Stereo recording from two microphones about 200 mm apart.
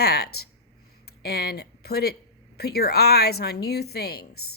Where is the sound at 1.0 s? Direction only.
50° left (ahead or behind).